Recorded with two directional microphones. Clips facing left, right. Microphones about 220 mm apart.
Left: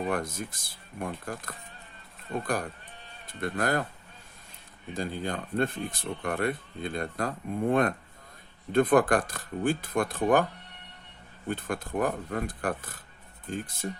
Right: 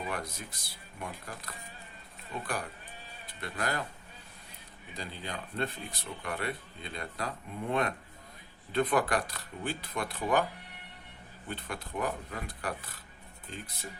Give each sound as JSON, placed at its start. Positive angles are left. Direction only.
{"t": 0.0, "sound": "speech", "side_deg": 50}
{"t": 4.9, "sound": "speech", "side_deg": 50}
{"t": 11.4, "sound": "speech", "side_deg": 50}